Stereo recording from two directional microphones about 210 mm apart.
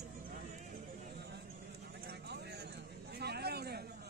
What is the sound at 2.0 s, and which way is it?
Vehicle, 50° right (ahead or behind).